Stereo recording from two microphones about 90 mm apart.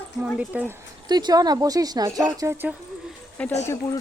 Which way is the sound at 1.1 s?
50° right (ahead or behind).